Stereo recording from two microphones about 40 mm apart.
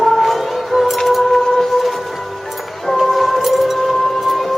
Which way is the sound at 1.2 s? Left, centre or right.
Centre.